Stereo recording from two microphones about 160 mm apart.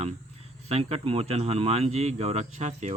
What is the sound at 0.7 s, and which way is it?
Speech, 40° right (ahead or behind).